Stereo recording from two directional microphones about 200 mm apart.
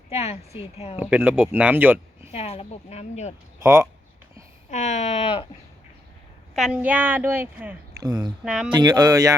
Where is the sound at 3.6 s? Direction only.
15° right (ahead or behind).